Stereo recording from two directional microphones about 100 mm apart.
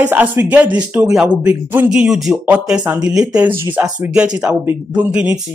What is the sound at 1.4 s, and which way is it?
Speech, 15° right (ahead or behind).